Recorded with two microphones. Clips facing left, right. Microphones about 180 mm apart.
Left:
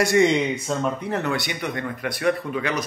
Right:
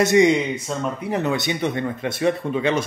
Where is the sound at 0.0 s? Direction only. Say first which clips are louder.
Right 3 dB; 20° right (ahead or behind).